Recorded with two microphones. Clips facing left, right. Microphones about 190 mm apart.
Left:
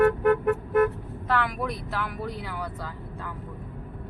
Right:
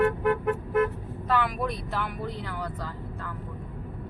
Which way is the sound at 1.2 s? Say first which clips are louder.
Even; centre (ahead or behind).